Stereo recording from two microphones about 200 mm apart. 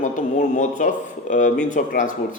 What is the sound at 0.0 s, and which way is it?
A man's voice, 40° left (ahead or behind).